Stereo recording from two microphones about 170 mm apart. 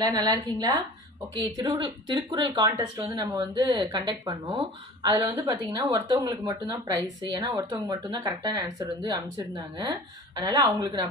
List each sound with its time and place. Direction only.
0.0 s a woman's voice: 25° right (ahead or behind)
10.4 s a woman's voice: 20° right (ahead or behind)